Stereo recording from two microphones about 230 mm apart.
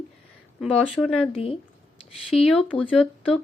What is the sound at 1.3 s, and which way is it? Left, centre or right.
Speech, left.